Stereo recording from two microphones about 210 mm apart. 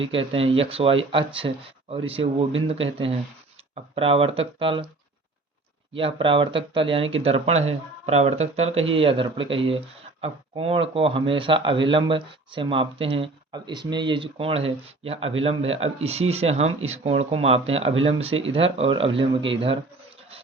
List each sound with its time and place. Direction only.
0.1 s speech: 25° right (ahead or behind)
5.9 s speech: 25° right (ahead or behind)